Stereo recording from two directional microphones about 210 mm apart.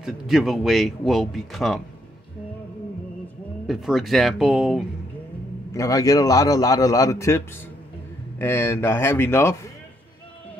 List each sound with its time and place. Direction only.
0.0 s speech: centre (ahead or behind)
3.6 s speech: centre (ahead or behind)
5.7 s a man's voice: 15° left (ahead or behind)